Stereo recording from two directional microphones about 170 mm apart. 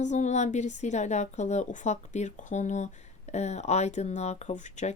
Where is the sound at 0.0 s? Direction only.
45° left (ahead or behind).